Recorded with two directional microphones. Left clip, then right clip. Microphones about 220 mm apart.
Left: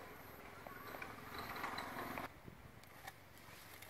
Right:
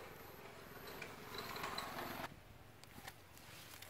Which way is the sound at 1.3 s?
30° right (ahead or behind).